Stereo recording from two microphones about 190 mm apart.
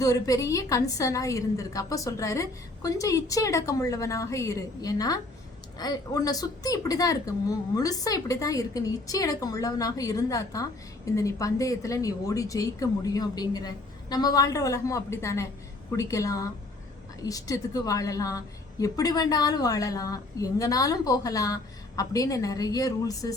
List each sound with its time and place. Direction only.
0.0 s a woman's voice: 20° left (ahead or behind)